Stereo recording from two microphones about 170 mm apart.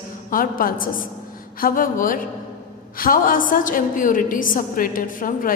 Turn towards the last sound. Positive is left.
turn(degrees=55)  # may be behind; listen again after turning